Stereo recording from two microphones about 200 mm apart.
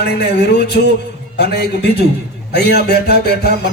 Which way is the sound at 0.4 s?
55° left (ahead or behind).